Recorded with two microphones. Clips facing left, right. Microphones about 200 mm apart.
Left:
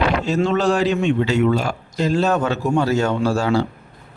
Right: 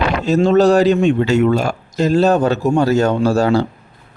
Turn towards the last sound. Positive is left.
turn(degrees=-40)  # may be behind; listen again after turning